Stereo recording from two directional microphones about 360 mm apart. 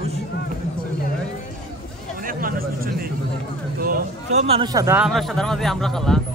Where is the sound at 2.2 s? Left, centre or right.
Right.